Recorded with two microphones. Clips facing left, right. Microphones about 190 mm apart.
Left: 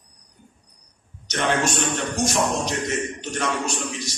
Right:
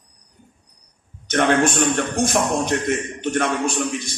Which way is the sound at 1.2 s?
55° right (ahead or behind).